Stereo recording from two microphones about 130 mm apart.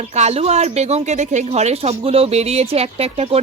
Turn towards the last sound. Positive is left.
turn(degrees=-50)  # may be behind; listen again after turning